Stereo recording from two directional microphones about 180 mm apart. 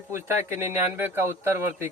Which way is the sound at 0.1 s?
15° right (ahead or behind).